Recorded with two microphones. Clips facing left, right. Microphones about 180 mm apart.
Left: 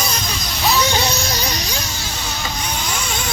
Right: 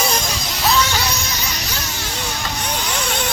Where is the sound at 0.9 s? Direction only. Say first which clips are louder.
Left 3 dB; 25° left (ahead or behind).